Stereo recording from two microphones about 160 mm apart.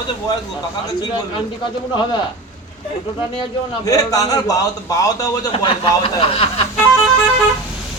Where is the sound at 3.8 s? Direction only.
20° left (ahead or behind).